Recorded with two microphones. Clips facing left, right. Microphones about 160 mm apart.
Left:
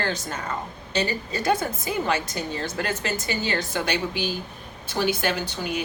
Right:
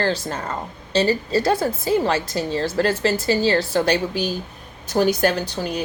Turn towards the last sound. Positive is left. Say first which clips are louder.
# right 3 dB
turn(degrees=-35)  # may be behind; listen again after turning